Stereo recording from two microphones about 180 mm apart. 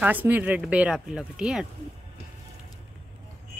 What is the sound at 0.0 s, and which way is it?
Speech, 10° right (ahead or behind).